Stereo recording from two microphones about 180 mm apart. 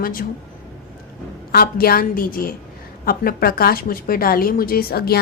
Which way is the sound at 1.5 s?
55° left (ahead or behind).